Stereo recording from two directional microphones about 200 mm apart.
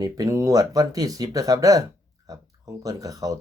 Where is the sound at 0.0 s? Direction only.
15° right (ahead or behind).